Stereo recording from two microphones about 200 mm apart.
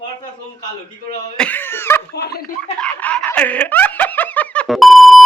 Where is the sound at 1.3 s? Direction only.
5° left (ahead or behind).